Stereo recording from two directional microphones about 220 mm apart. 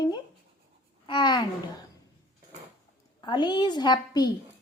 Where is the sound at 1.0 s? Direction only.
20° left (ahead or behind).